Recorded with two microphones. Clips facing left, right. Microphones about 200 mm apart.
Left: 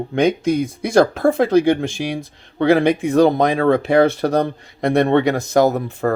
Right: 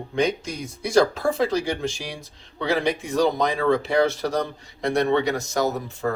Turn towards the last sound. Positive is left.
turn(degrees=55)  # may be behind; listen again after turning